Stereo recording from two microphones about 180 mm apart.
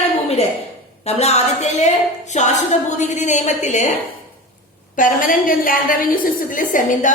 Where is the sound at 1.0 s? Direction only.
35° left (ahead or behind).